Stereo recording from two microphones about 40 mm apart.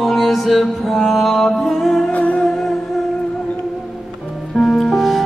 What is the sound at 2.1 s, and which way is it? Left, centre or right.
Music, left.